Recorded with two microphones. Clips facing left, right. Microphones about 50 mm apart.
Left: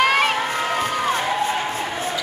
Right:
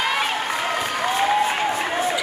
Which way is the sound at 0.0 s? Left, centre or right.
Left.